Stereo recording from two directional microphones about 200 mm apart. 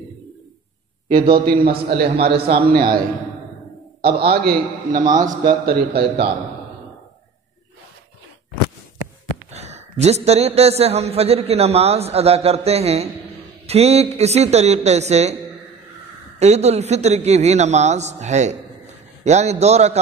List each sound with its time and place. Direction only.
1.4 s a man's voice: 45° right (ahead or behind)
4.0 s a man's voice: 50° right (ahead or behind)
9.5 s a man's voice: 35° right (ahead or behind)